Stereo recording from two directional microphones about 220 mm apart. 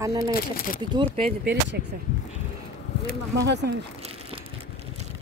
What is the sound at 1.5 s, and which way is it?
Speech, 50° right (ahead or behind).